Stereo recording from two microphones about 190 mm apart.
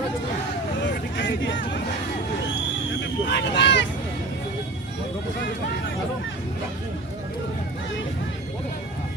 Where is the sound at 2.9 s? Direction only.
65° left (ahead or behind).